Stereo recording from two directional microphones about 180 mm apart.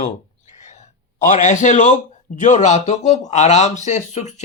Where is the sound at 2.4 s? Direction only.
40° left (ahead or behind).